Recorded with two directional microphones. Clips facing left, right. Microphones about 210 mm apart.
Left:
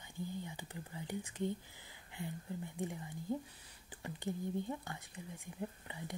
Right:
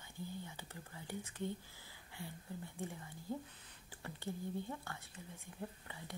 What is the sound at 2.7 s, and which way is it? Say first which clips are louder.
Speech: left 5 dB; 15° left (ahead or behind).